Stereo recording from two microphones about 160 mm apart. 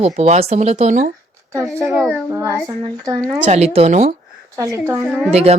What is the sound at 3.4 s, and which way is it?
Speech, 45° right (ahead or behind).